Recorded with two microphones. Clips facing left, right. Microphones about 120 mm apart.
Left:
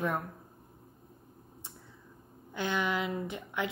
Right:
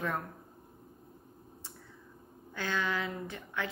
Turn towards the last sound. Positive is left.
turn(degrees=15)  # may be behind; listen again after turning